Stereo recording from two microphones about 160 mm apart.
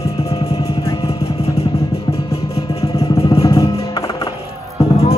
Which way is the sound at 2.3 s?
40° left (ahead or behind).